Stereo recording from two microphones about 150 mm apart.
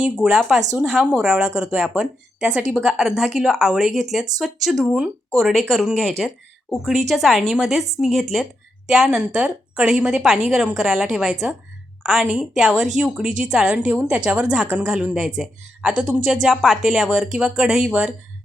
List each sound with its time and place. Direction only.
0.0 s a woman's voice: 5° right (ahead or behind)